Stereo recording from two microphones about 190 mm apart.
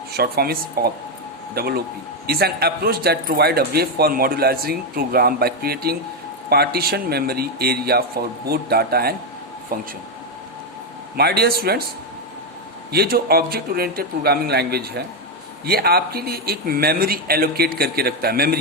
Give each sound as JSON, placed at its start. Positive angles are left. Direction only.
{"t": 0.1, "sound": "a man's voice", "side_deg": -55}
{"t": 11.2, "sound": "a man's voice", "side_deg": -55}
{"t": 12.9, "sound": "a man's voice", "side_deg": -55}